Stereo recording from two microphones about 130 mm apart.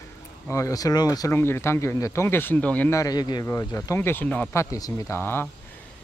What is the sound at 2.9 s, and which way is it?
A man's voice, 30° left (ahead or behind).